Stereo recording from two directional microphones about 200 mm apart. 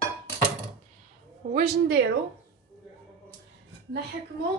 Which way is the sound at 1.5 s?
55° right (ahead or behind).